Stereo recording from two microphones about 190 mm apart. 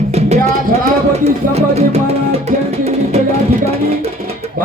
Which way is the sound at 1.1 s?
35° right (ahead or behind).